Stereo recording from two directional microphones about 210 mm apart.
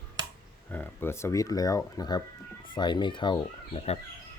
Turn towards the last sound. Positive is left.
turn(degrees=30)  # may be behind; listen again after turning